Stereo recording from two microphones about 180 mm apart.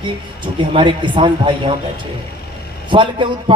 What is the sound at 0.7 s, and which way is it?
Speech, 25° right (ahead or behind).